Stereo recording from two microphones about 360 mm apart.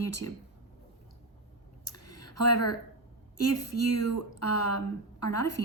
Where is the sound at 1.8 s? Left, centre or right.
Left.